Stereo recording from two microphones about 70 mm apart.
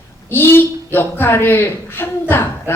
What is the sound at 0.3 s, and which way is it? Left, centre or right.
A woman's voice, left.